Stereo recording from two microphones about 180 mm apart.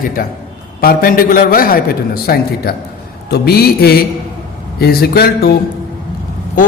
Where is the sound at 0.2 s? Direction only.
55° left (ahead or behind).